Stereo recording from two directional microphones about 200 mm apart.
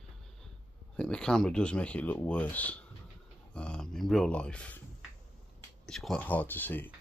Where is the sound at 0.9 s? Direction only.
5° left (ahead or behind).